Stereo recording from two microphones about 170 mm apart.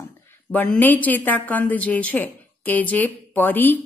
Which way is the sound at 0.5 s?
5° left (ahead or behind).